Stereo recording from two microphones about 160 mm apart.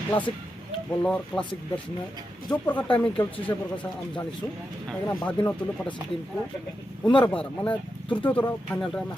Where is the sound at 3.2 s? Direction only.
30° left (ahead or behind).